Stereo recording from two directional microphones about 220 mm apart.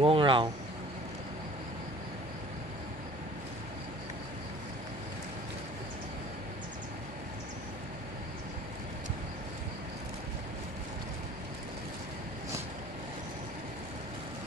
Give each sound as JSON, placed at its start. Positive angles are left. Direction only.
{"t": 0.0, "sound": "speech", "side_deg": -25}